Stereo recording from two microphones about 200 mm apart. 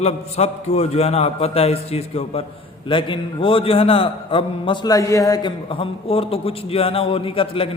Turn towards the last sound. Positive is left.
turn(degrees=25)  # may be behind; listen again after turning